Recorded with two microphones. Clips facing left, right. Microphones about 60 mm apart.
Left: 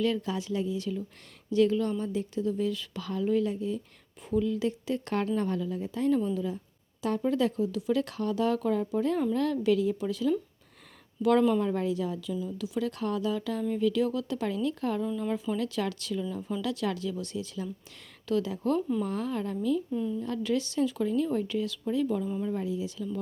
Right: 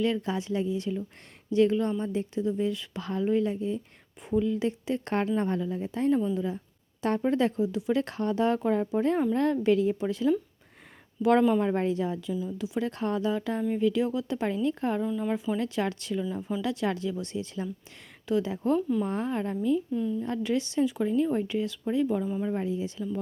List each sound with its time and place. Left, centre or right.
0.0 s speech: right
12.3 s speech: centre
15.0 s speech: centre
18.8 s speech: centre
19.0 s speech: right
19.9 s speech: centre
20.2 s speech: right